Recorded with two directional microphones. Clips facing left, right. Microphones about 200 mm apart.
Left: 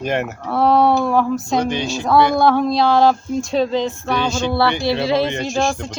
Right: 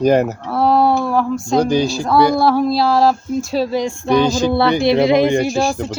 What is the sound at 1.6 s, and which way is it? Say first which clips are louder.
Speech: right 5 dB; 35° right (ahead or behind).